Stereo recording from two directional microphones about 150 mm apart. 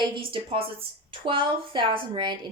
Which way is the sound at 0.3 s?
35° right (ahead or behind).